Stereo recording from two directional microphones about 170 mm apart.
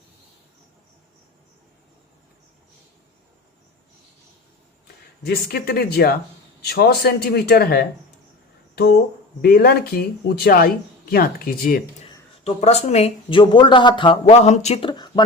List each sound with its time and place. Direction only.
5.2 s speech: 65° left (ahead or behind)
8.7 s a sound: 70° left (ahead or behind)
9.4 s speech: 65° left (ahead or behind)
12.5 s speech: 40° left (ahead or behind)